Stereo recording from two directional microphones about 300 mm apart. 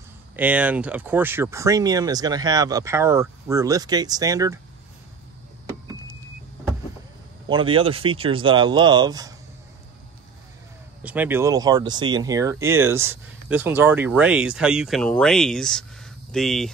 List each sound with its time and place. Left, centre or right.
0.4 s speech: centre
7.4 s speech: centre
11.0 s speech: centre